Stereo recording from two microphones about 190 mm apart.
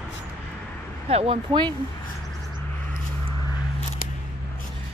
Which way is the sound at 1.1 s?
30° right (ahead or behind).